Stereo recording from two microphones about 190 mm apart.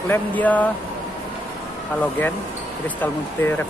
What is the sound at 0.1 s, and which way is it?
Speech, 10° left (ahead or behind).